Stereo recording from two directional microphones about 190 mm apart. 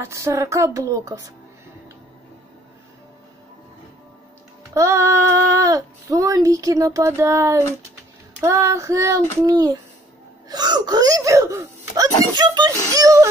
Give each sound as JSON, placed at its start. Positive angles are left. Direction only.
{"t": 0.0, "sound": "speech", "side_deg": -15}
{"t": 4.7, "sound": "speech", "side_deg": -15}